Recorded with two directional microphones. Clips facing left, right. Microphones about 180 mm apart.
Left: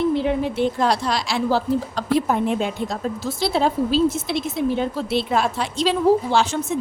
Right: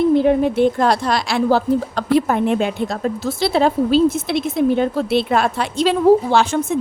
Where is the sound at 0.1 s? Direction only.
50° right (ahead or behind).